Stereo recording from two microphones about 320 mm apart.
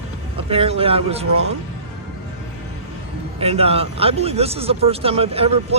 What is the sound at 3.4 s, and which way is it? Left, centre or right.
Speech, centre.